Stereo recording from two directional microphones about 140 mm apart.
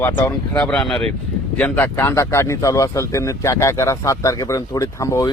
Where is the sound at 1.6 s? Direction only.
15° left (ahead or behind).